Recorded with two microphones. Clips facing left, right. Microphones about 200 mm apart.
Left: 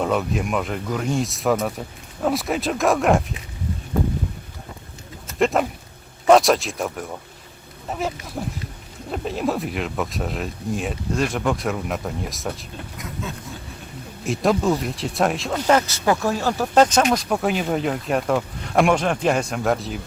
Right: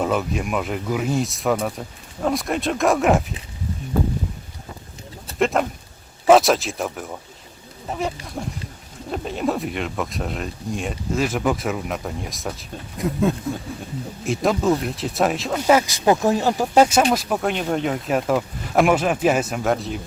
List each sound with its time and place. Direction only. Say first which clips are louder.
0.0 s speech: even; centre (ahead or behind)
5.4 s speech: left 1 dB; centre (ahead or behind)
13.5 s a sound: right 10 dB; 55° right (ahead or behind)
14.3 s speech: even; centre (ahead or behind)